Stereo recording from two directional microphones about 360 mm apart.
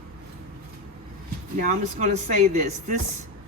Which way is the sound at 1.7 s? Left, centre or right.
Centre.